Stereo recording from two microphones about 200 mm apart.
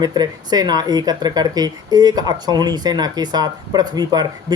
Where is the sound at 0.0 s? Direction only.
20° right (ahead or behind).